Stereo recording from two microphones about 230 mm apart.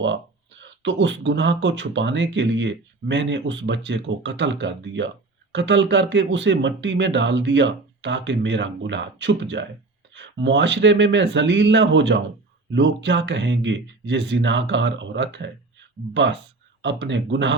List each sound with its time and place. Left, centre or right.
0.0 s speech: right